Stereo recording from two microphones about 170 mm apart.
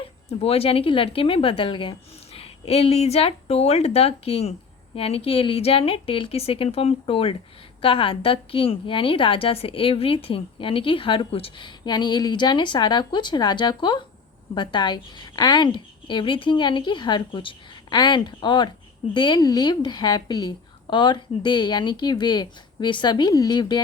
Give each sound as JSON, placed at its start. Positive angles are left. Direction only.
{"t": 0.3, "sound": "a woman's voice", "side_deg": 35}